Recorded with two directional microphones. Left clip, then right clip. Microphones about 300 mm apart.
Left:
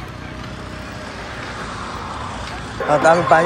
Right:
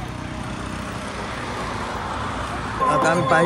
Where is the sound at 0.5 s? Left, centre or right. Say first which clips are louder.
Right 2 dB; centre.